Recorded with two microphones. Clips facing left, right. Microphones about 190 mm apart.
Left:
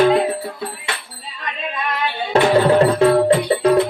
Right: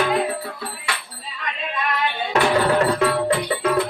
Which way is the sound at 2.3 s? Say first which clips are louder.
Left 5 dB; 30° left (ahead or behind).